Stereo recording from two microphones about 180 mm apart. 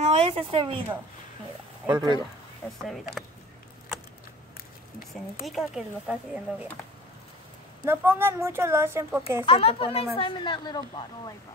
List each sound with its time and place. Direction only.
0.0 s speech: 35° right (ahead or behind)
1.9 s speech: 25° right (ahead or behind)
2.6 s speech: 10° left (ahead or behind)
5.1 s speech: centre (ahead or behind)
7.8 s speech: 10° right (ahead or behind)
9.5 s a woman's voice: 30° left (ahead or behind)